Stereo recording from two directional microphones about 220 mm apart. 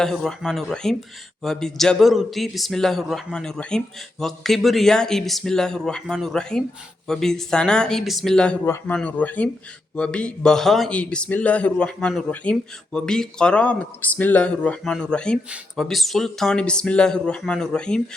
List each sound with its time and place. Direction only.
0.0 s speech: centre (ahead or behind)